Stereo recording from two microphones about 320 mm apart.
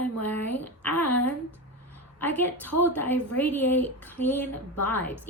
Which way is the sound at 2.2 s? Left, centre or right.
Centre.